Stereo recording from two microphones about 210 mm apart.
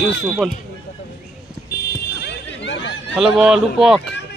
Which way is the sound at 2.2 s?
60° left (ahead or behind).